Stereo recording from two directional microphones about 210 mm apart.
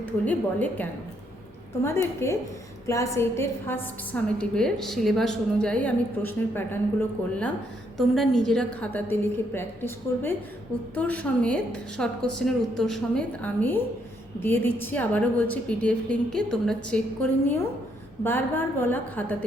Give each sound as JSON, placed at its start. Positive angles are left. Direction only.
{"t": 0.0, "sound": "a woman's voice", "side_deg": 5}
{"t": 7.9, "sound": "a woman's voice", "side_deg": 0}